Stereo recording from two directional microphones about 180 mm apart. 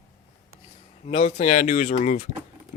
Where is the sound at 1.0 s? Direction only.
35° left (ahead or behind).